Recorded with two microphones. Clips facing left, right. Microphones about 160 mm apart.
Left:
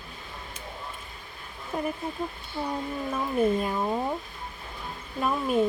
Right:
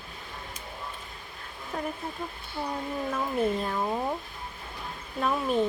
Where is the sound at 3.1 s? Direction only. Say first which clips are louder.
Left 4 dB; 10° left (ahead or behind).